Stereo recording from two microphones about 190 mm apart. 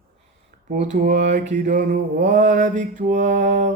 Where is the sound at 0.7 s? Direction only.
40° right (ahead or behind).